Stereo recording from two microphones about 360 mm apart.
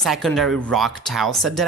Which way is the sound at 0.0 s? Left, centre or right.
Centre.